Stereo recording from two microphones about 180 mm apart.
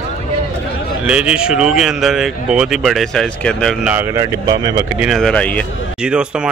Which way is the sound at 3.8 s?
10° right (ahead or behind).